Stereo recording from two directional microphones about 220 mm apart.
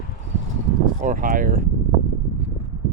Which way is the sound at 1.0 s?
35° right (ahead or behind).